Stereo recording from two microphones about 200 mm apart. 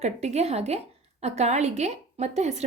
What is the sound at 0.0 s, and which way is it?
A woman's voice, 35° right (ahead or behind).